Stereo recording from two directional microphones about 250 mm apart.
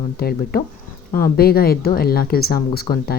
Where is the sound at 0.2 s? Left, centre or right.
Left.